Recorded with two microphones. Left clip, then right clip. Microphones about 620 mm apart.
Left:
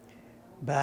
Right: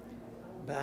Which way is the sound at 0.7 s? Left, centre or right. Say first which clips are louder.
Left 9 dB; left.